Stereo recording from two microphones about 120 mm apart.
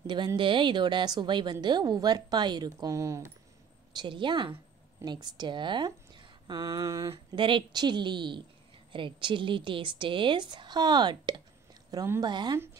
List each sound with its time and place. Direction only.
0.0 s a woman's voice: 40° right (ahead or behind)
3.9 s a woman's voice: 40° right (ahead or behind)
7.3 s a woman's voice: 45° right (ahead or behind)